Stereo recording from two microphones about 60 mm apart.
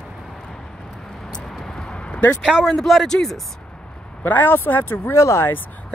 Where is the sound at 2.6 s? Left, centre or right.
Centre.